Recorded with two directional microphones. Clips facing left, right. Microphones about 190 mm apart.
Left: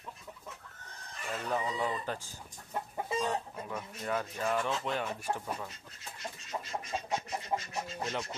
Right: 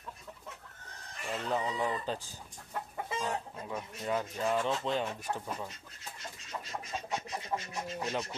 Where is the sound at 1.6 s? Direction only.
15° right (ahead or behind).